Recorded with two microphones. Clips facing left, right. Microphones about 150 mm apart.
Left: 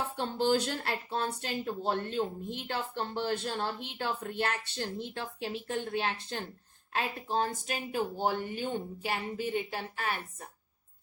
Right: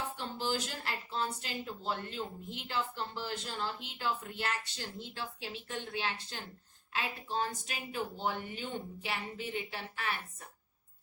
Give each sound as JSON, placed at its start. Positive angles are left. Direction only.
{"t": 0.2, "sound": "a woman's voice", "side_deg": 60}